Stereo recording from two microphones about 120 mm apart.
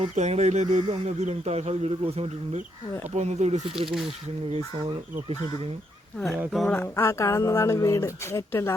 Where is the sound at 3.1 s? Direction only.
70° right (ahead or behind).